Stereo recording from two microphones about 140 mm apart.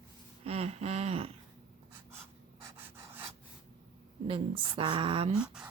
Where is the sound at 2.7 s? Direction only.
15° right (ahead or behind).